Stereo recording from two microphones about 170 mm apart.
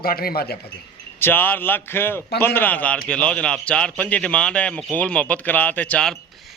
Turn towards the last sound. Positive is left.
turn(degrees=5)  # may be behind; listen again after turning